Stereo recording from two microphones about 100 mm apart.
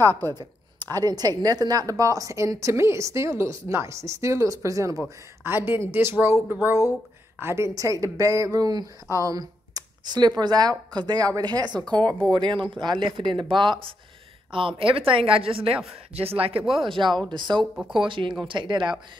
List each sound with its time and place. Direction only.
0.0 s a woman's voice: 20° left (ahead or behind)
1.0 s speech: 40° right (ahead or behind)
5.4 s a woman's voice: 20° right (ahead or behind); by 16.6 s 70° right (ahead or behind)
16.7 s speech: 60° right (ahead or behind)